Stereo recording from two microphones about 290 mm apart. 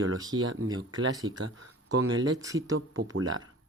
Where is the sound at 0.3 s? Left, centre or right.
Right.